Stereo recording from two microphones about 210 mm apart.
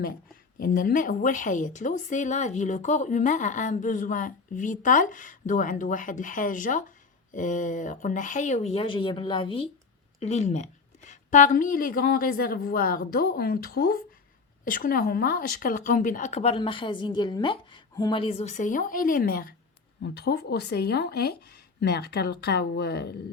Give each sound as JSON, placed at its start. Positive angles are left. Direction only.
{"t": 0.6, "sound": "speech", "side_deg": 40}